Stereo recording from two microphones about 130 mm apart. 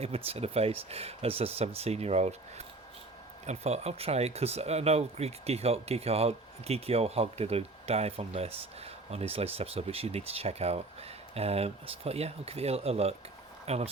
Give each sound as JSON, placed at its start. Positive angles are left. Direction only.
{"t": 0.3, "sound": "speech", "side_deg": -50}